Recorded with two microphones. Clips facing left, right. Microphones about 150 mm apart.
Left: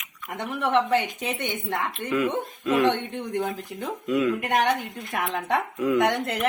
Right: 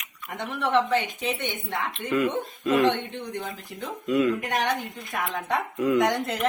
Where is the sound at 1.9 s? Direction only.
Centre (ahead or behind).